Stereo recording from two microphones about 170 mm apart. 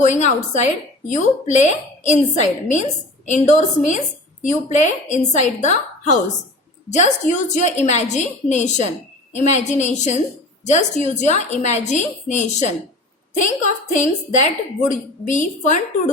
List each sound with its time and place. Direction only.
0.0 s a woman's voice: 45° left (ahead or behind)
13.9 s a woman's voice: 45° left (ahead or behind)